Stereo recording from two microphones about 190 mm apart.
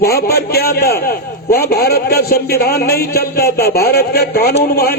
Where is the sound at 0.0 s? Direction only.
55° left (ahead or behind).